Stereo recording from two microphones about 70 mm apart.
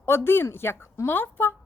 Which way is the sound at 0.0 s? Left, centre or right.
Left.